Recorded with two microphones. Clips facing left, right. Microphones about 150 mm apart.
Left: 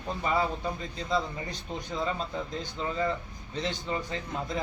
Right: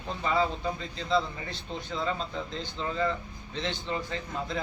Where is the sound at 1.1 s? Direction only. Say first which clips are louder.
Right 2 dB; 15° left (ahead or behind).